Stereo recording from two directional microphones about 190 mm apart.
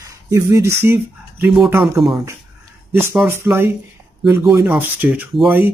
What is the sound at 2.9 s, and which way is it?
Speech, 15° right (ahead or behind).